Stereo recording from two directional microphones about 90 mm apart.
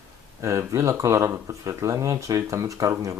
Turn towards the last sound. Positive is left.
turn(degrees=-35)  # may be behind; listen again after turning